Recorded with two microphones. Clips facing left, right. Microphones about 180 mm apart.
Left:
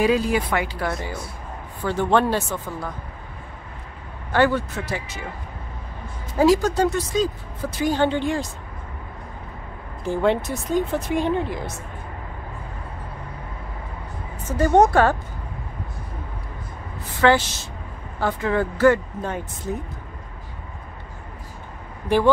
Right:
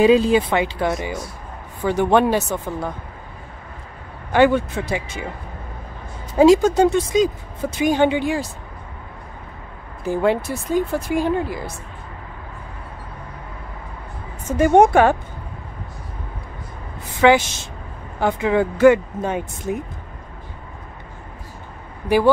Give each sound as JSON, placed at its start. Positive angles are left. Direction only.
{"t": 0.0, "sound": "speech", "side_deg": -25}
{"t": 4.3, "sound": "speech", "side_deg": -15}
{"t": 6.3, "sound": "speech", "side_deg": -20}
{"t": 10.0, "sound": "speech", "side_deg": -5}
{"t": 14.6, "sound": "speech", "side_deg": -20}
{"t": 17.2, "sound": "speech", "side_deg": -15}